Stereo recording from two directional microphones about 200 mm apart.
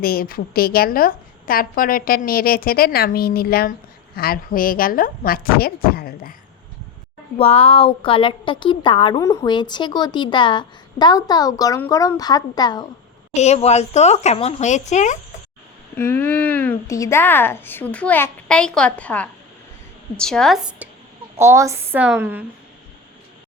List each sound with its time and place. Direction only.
0.0 s a woman's voice: 50° left (ahead or behind)
7.3 s a woman's voice: 30° left (ahead or behind)
13.3 s speech: 35° left (ahead or behind)
16.0 s a woman's voice: 10° left (ahead or behind)
21.3 s a woman's voice: 15° right (ahead or behind)